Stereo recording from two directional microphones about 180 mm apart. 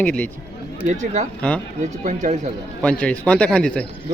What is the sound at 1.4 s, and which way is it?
Speech, 5° left (ahead or behind).